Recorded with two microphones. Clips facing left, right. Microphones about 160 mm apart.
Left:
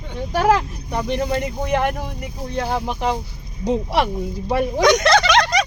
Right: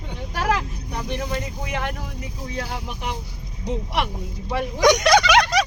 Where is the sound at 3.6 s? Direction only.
90° left.